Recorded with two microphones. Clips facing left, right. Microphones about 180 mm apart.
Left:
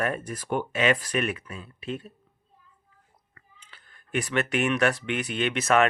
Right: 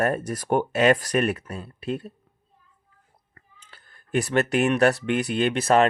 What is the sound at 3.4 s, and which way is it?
Speech, 40° right (ahead or behind).